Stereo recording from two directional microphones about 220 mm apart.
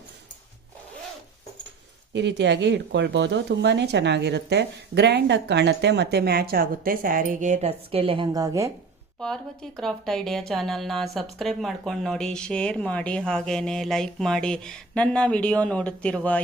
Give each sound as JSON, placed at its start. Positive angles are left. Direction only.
{"t": 2.1, "sound": "speech", "side_deg": -50}
{"t": 9.2, "sound": "speech", "side_deg": 5}